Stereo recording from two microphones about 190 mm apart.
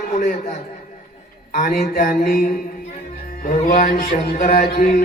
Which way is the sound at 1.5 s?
45° left (ahead or behind).